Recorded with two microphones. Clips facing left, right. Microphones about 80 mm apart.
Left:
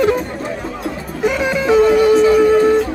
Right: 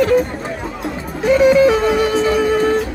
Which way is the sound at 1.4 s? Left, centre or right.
Centre.